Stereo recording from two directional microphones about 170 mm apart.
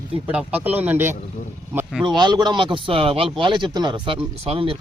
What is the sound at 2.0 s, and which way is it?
Speech, 25° right (ahead or behind).